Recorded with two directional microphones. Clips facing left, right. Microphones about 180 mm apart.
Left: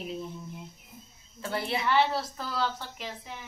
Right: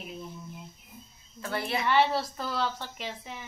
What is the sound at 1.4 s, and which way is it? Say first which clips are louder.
Speech: left 1 dB; 25° left (ahead or behind).